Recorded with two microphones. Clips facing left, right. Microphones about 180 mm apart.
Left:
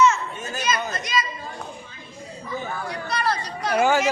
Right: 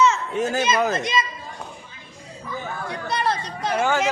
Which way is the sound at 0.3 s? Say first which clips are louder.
Right 10 dB; 85° right.